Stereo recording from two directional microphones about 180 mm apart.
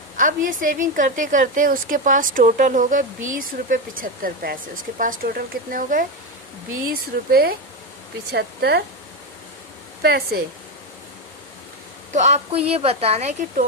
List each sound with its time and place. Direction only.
0.2 s a woman's voice: 45° right (ahead or behind); by 8.8 s 65° right (ahead or behind)
10.0 s speech: 60° right (ahead or behind)
12.1 s a woman's voice: 40° right (ahead or behind)